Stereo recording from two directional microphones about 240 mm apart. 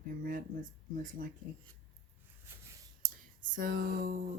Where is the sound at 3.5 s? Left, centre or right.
Right.